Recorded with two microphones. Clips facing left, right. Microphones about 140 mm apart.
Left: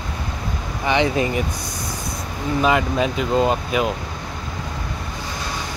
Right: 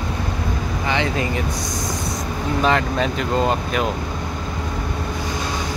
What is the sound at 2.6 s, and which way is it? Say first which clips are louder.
Speech: left 1 dB; 5° left (ahead or behind).